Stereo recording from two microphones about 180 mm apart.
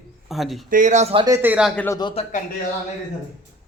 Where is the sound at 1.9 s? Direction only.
25° left (ahead or behind).